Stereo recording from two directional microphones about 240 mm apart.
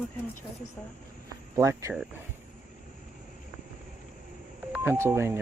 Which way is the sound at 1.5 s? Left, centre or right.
Centre.